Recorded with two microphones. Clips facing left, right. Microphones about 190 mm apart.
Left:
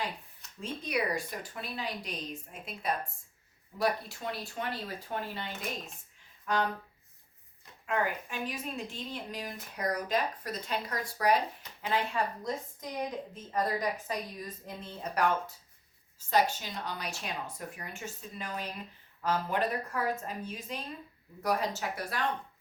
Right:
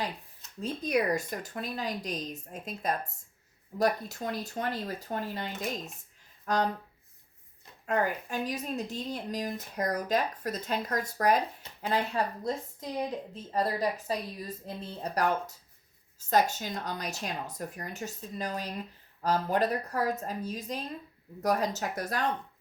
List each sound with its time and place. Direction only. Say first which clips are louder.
0.6 s a woman's voice: right 5 dB; 45° right (ahead or behind)
7.9 s speech: right 3 dB; 40° right (ahead or behind)